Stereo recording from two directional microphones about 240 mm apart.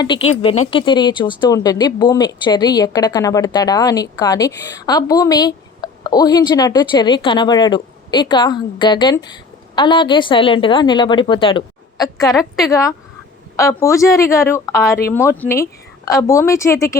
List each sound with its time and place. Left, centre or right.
0.0 s a woman's voice: centre
12.3 s a woman's voice: centre
13.6 s a woman's voice: centre